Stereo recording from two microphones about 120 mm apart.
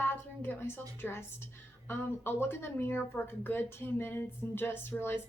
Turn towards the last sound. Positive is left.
turn(degrees=20)  # may be behind; listen again after turning